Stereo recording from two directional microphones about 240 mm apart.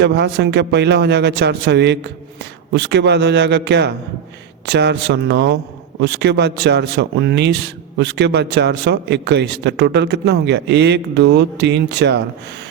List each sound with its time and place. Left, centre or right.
0.0 s a man's voice: right